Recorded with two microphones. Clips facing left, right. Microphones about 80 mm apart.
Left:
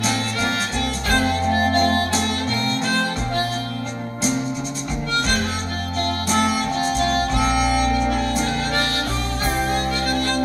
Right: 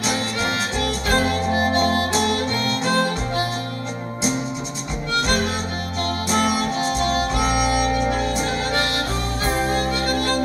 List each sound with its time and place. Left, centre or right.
1.5 s music: right
6.4 s music: right
7.3 s music: centre
10.0 s music: right